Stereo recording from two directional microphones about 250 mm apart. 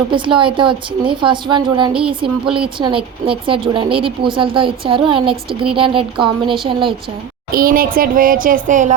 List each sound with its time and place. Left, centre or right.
0.1 s a woman's voice: centre
7.5 s speech: right